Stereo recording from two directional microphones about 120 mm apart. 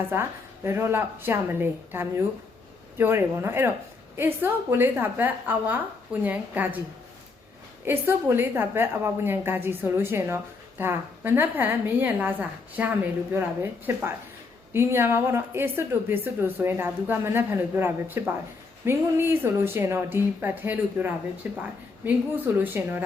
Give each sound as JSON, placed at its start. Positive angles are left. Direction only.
{"t": 0.1, "sound": "a woman's voice", "side_deg": -20}
{"t": 7.9, "sound": "a woman's voice", "side_deg": -20}